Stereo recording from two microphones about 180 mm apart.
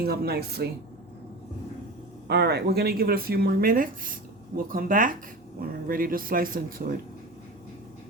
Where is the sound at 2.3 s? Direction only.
65° right (ahead or behind).